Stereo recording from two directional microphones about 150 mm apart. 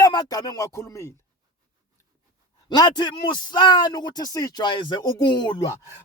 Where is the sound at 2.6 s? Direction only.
30° left (ahead or behind).